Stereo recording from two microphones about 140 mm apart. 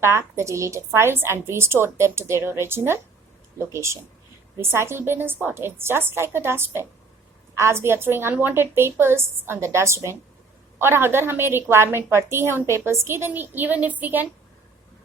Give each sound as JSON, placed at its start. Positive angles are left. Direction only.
{"t": 0.0, "sound": "a woman's voice", "side_deg": -20}